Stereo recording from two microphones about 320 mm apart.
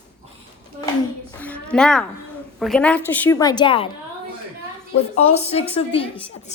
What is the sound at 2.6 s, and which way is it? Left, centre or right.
A woman's voice, centre.